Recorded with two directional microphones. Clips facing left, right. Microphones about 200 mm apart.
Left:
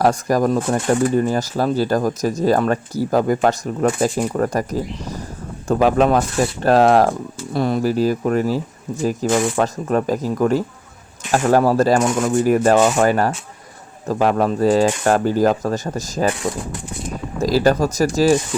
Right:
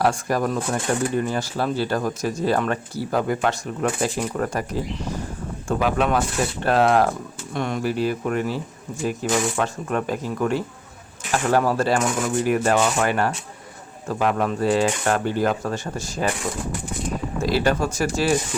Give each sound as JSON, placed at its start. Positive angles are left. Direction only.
{"t": 0.0, "sound": "speech", "side_deg": 40}
{"t": 17.4, "sound": "speech", "side_deg": 40}